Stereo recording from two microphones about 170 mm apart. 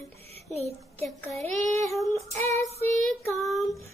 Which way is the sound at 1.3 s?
40° right (ahead or behind).